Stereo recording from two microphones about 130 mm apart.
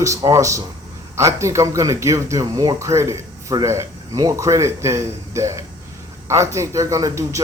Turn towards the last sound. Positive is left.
turn(degrees=-25)  # may be behind; listen again after turning